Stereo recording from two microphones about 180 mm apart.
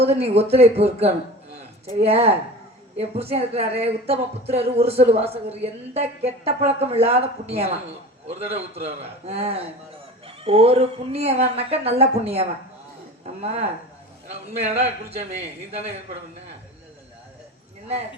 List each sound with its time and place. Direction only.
0.0 s speech: 35° right (ahead or behind)